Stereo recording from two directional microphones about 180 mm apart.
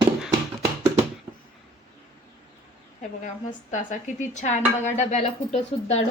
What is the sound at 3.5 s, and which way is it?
Speech, 45° left (ahead or behind).